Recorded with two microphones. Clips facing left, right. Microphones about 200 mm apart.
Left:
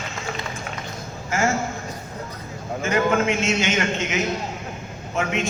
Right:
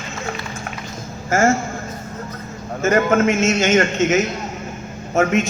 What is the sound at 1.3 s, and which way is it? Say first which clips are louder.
Speech: right 6 dB; 50° right (ahead or behind).